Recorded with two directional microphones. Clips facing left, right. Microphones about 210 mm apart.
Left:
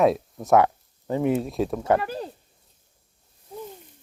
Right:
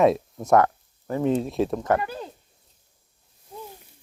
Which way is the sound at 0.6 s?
15° left (ahead or behind).